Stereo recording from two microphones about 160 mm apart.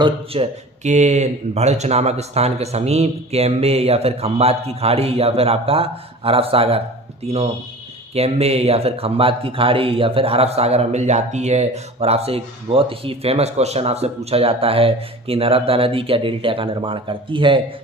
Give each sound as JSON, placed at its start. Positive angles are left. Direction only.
{"t": 0.3, "sound": "speech", "side_deg": -35}
{"t": 8.1, "sound": "speech", "side_deg": -40}